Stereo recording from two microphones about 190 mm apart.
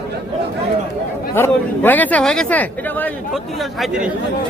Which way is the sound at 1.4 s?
10° left (ahead or behind).